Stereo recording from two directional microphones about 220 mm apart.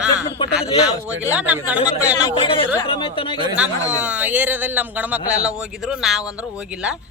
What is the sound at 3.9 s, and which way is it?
Speech, 5° right (ahead or behind).